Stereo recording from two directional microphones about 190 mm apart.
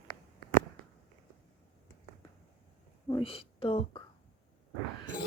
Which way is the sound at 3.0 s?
25° left (ahead or behind).